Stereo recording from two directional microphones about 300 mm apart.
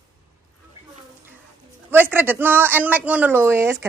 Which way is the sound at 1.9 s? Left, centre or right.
Centre.